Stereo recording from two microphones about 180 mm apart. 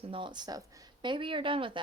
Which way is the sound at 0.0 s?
30° right (ahead or behind).